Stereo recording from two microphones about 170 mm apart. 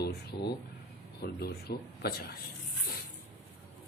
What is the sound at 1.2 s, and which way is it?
Speech, 70° left (ahead or behind).